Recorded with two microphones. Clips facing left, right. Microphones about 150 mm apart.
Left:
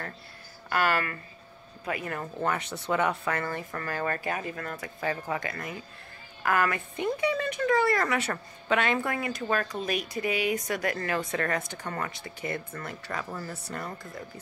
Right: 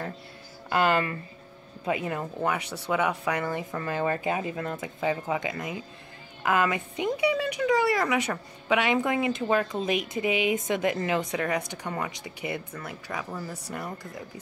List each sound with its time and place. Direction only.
0.7 s a woman's voice: 20° right (ahead or behind)